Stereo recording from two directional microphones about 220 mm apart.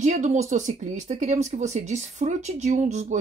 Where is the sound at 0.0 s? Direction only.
35° right (ahead or behind).